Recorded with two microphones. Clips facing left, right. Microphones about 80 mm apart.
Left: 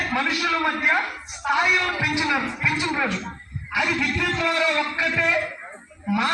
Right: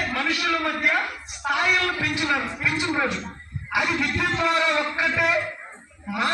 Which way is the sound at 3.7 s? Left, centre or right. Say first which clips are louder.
Even; right.